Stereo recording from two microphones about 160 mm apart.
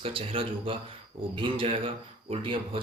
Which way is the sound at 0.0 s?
35° right (ahead or behind).